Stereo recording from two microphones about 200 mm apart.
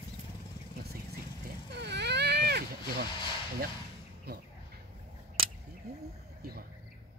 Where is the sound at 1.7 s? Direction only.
55° right (ahead or behind).